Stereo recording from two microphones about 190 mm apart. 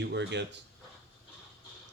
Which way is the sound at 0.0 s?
65° right (ahead or behind).